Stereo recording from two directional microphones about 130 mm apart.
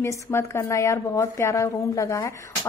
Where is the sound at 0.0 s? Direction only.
20° left (ahead or behind).